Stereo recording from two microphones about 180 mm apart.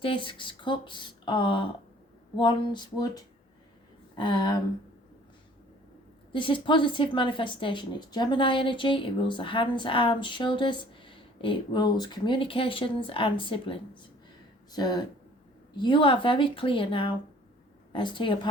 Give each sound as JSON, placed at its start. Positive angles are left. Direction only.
{"t": 0.0, "sound": "a woman's voice", "side_deg": 30}
{"t": 6.3, "sound": "a woman's voice", "side_deg": 25}